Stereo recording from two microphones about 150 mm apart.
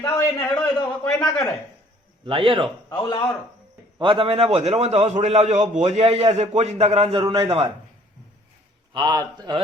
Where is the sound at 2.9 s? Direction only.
35° left (ahead or behind).